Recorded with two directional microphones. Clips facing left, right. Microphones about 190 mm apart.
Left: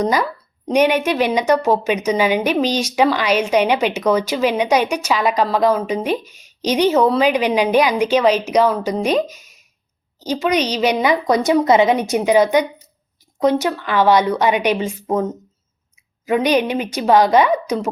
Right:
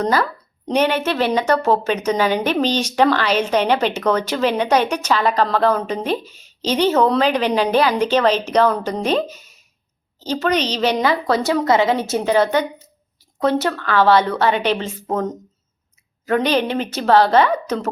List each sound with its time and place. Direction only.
0.0 s a woman's voice: 15° left (ahead or behind)